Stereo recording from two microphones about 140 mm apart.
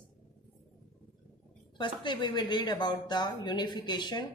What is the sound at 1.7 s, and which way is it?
A woman's voice, 35° left (ahead or behind).